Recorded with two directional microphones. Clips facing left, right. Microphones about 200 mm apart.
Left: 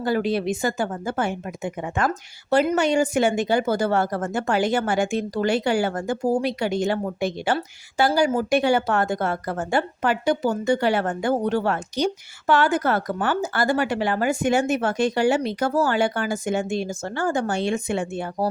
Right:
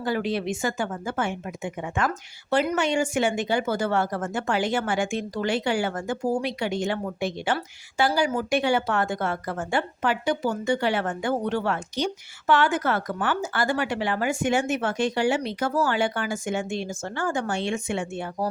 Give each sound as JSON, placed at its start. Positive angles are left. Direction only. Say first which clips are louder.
{"t": 0.0, "sound": "a woman's voice", "louder": "left 4 dB", "side_deg": 40}